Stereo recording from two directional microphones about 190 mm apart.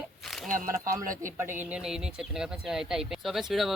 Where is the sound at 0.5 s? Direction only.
45° right (ahead or behind).